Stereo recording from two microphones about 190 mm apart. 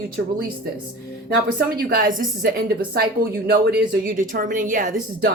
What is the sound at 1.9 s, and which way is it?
Speech, 45° right (ahead or behind).